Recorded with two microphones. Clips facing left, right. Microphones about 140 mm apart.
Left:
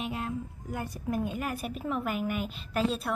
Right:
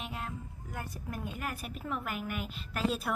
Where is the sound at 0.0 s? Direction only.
10° left (ahead or behind).